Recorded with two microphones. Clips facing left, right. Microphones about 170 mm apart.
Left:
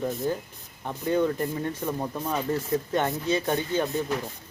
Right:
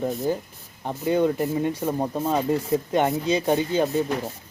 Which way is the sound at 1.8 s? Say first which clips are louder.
Right 5 dB; 30° right (ahead or behind).